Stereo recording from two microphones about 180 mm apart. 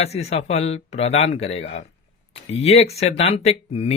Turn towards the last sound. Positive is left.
turn(degrees=35)  # may be behind; listen again after turning